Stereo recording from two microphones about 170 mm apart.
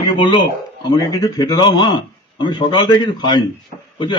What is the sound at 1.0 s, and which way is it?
A man's voice, 20° left (ahead or behind).